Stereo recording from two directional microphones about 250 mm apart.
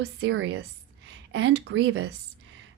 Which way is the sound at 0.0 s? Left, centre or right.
Right.